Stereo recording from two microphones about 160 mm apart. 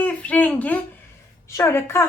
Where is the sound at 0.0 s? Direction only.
10° left (ahead or behind).